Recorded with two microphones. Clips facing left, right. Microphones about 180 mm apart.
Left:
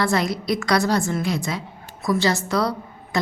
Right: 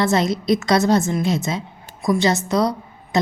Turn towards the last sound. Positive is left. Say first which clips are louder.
# right 2 dB
turn(degrees=-20)  # may be behind; listen again after turning